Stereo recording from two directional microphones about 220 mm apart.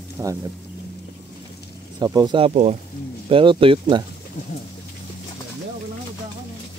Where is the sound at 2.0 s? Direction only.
20° right (ahead or behind).